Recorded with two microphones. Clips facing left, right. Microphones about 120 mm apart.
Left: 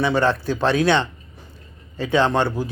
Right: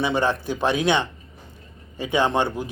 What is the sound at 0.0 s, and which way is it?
A man's voice, 15° right (ahead or behind).